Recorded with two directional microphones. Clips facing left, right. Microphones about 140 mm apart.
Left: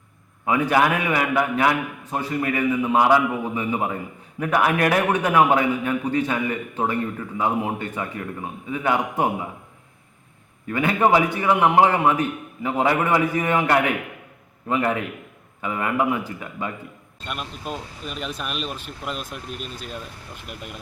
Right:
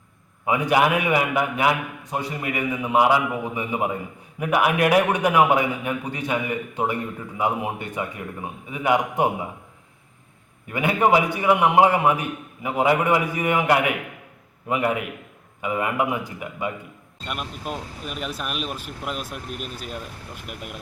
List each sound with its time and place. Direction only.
0.4 s a man's voice: 15° right (ahead or behind)
10.7 s a man's voice: 15° right (ahead or behind)
17.2 s speech: 5° right (ahead or behind)